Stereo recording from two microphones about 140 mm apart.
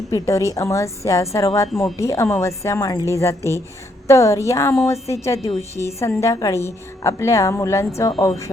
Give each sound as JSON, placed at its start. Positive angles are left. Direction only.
{"t": 0.1, "sound": "a woman's voice", "side_deg": 25}